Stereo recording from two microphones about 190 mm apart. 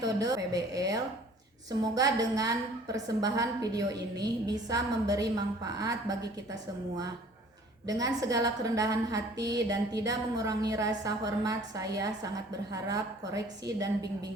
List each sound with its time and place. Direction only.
0.0 s a woman's voice: 20° right (ahead or behind)
7.9 s a woman's voice: 20° right (ahead or behind)